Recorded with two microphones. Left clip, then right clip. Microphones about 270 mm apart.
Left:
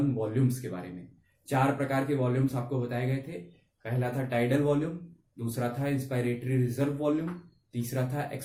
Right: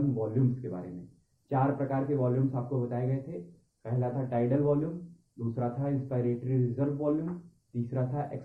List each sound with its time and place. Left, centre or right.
0.1 s speech: left